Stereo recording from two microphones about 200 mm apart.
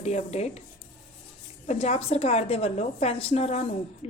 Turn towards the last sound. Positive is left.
turn(degrees=30)  # may be behind; listen again after turning